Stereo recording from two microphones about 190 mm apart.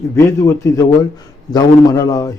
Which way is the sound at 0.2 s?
15° left (ahead or behind).